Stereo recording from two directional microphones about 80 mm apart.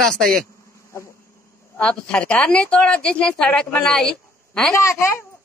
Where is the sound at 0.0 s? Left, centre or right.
Centre.